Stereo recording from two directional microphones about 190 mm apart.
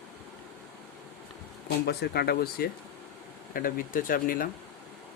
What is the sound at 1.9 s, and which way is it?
Speech, 55° left (ahead or behind).